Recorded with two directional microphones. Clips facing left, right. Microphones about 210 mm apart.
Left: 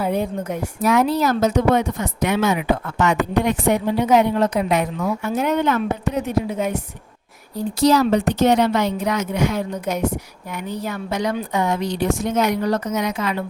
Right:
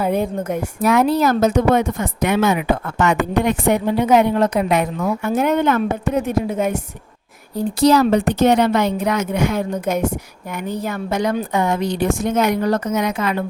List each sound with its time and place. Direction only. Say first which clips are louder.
0.0 s a woman's voice: right 2 dB; 50° right (ahead or behind)